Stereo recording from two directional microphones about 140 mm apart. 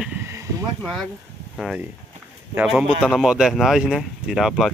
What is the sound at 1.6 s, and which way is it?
Speech, 5° right (ahead or behind).